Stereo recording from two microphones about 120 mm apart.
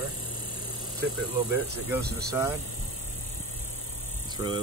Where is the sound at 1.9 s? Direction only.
20° right (ahead or behind).